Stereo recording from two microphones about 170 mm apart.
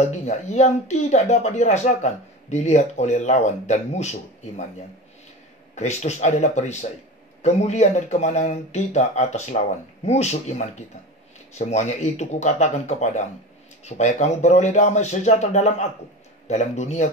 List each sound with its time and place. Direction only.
0.3 s speech: 40° left (ahead or behind)
5.8 s speech: 40° left (ahead or behind)